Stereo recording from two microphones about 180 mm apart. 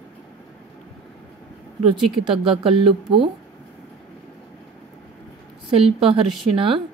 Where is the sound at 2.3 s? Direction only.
30° right (ahead or behind).